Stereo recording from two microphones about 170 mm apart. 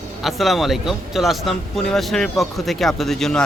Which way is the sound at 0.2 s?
Centre (ahead or behind).